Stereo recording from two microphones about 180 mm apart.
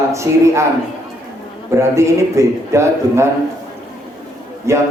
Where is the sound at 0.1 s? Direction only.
15° right (ahead or behind).